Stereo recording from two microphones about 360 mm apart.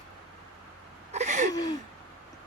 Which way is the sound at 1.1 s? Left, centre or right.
Centre.